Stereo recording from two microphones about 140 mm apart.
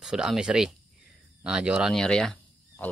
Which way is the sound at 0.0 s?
5° right (ahead or behind).